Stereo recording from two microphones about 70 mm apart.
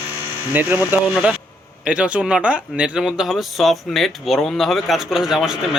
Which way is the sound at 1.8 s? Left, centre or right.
Centre.